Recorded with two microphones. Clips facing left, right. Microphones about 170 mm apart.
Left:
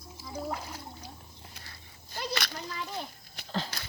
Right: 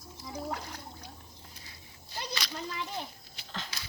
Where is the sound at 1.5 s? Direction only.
65° left (ahead or behind).